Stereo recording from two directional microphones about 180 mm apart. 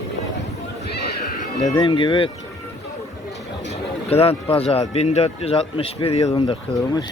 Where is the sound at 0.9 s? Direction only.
65° left (ahead or behind).